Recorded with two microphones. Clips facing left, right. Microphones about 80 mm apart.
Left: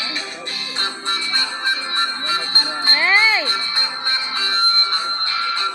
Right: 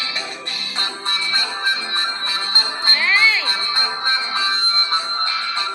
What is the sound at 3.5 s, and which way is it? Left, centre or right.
Music, right.